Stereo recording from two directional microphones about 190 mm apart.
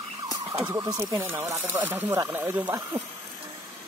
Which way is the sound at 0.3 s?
15° right (ahead or behind).